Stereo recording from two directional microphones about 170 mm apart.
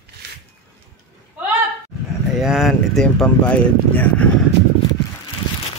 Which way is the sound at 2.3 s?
Centre (ahead or behind).